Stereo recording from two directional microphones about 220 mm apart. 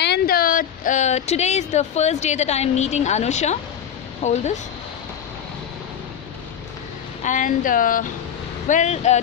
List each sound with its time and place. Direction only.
0.0 s a woman's voice: 45° left (ahead or behind)
7.2 s speech: 35° left (ahead or behind)